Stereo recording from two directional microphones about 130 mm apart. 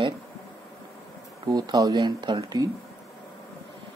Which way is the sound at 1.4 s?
30° right (ahead or behind).